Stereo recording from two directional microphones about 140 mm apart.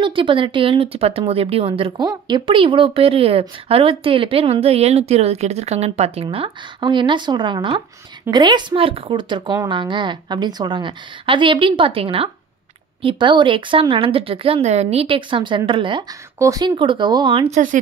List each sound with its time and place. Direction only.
0.0 s speech: 35° right (ahead or behind)
2.0 s speech: 30° right (ahead or behind)
16.3 s speech: 25° right (ahead or behind)
17.5 s speech: 65° right (ahead or behind)